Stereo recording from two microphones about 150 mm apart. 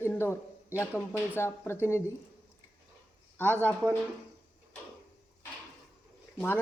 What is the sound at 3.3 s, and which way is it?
Speech, 10° left (ahead or behind).